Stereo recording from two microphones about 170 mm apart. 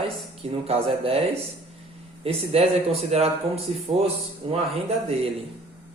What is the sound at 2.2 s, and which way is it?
Speech, 35° right (ahead or behind).